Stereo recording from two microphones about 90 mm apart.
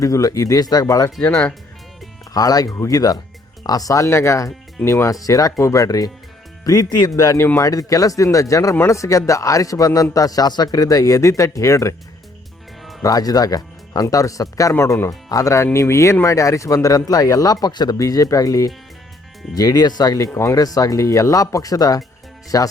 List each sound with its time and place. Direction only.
0.0 s a man's voice: 40° left (ahead or behind)
1.2 s speech: 15° left (ahead or behind)
2.3 s a man's voice: 45° left (ahead or behind)
7.6 s a man's voice: 40° left (ahead or behind)
13.0 s a man's voice: 45° left (ahead or behind)
17.9 s a man's voice: 40° left (ahead or behind)